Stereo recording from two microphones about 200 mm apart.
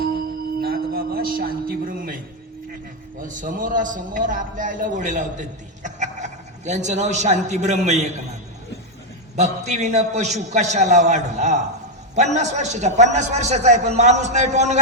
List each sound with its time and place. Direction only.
0.6 s music: 50° right (ahead or behind)
3.2 s a man's voice: 40° right (ahead or behind)
9.3 s a man's voice: 35° right (ahead or behind)